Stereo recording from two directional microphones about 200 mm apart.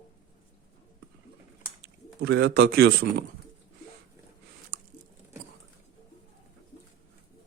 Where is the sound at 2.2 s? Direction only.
55° right (ahead or behind).